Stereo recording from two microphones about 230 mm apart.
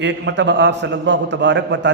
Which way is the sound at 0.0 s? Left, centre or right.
Right.